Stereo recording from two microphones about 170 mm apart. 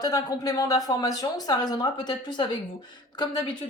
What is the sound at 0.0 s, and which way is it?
A woman's voice, 20° left (ahead or behind).